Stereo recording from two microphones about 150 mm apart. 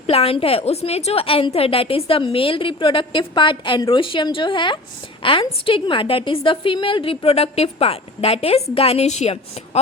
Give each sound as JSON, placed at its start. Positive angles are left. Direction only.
{"t": 0.1, "sound": "a woman's voice", "side_deg": 40}